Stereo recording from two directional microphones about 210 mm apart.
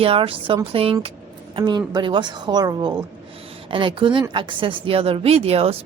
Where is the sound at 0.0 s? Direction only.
25° right (ahead or behind).